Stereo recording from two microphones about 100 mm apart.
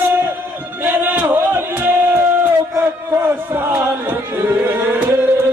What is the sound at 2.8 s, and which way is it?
Chant, 25° right (ahead or behind).